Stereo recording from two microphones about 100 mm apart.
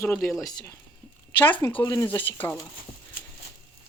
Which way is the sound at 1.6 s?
30° left (ahead or behind).